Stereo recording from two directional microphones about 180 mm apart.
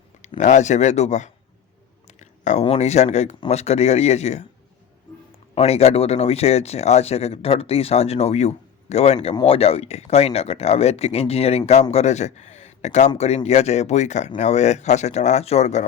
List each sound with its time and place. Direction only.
0.3 s speech: 40° left (ahead or behind)
5.5 s speech: 35° left (ahead or behind)